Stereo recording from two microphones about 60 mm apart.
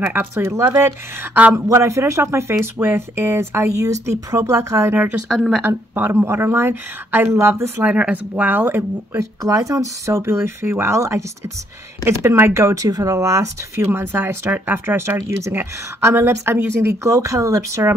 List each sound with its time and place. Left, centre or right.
0.0 s speech: right
5.7 s speech: right
6.2 s speech: right
7.3 s speech: right
7.8 s speech: right
9.4 s speech: right
11.0 s speech: right
12.0 s speech: right
12.7 s speech: right
15.1 s speech: right
17.0 s speech: right